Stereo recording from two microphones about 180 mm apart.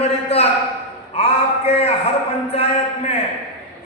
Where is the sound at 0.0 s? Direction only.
35° left (ahead or behind).